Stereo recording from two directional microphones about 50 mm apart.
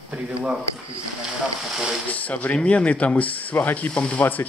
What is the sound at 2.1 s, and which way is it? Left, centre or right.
Speech, left.